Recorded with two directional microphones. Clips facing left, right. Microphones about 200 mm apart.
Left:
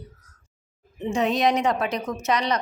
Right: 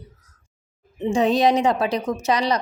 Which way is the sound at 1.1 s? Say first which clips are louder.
Right 4 dB; 30° right (ahead or behind).